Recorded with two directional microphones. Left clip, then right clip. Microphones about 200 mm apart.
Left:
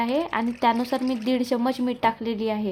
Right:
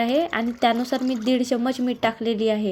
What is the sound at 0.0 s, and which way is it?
Speech, 10° right (ahead or behind).